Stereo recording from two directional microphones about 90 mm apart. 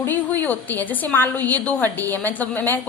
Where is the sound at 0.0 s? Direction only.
20° left (ahead or behind).